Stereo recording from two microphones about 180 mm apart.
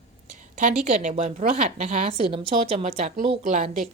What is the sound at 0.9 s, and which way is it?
A woman's voice, 35° right (ahead or behind).